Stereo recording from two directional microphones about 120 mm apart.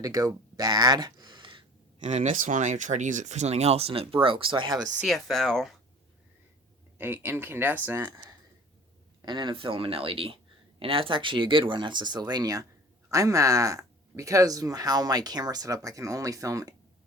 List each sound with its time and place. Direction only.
0.0 s speech: 25° right (ahead or behind); by 1.6 s 40° right (ahead or behind)
2.0 s speech: 85° right; by 4.9 s 35° right (ahead or behind)
4.9 s speech: centre (ahead or behind)
7.0 s speech: 20° right (ahead or behind)
8.0 s speech: 35° right (ahead or behind)